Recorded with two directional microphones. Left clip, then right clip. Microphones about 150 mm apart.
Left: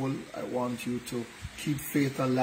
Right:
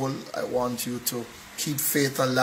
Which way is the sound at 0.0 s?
5° right (ahead or behind).